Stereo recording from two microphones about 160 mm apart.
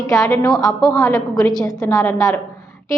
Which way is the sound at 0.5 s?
Centre (ahead or behind).